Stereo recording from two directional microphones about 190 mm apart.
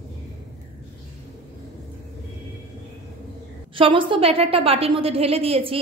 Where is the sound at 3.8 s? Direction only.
25° right (ahead or behind).